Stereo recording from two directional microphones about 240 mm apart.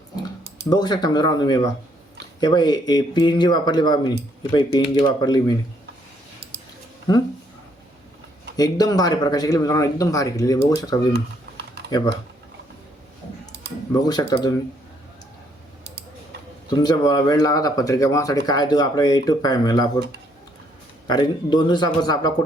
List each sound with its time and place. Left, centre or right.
0.6 s speech: centre
8.5 s speech: centre
11.1 s typing: right
11.9 s speech: centre
14.0 s speech: centre
16.6 s speech: centre
21.1 s speech: centre